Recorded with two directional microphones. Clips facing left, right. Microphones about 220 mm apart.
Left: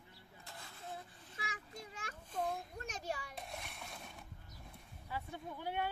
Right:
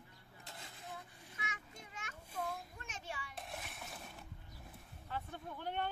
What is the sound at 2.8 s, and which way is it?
Hands, 40° left (ahead or behind).